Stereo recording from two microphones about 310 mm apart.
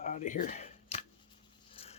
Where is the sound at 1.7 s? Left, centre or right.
Centre.